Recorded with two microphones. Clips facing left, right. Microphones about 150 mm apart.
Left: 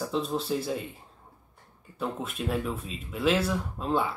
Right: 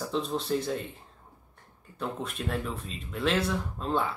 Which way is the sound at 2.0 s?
Centre (ahead or behind).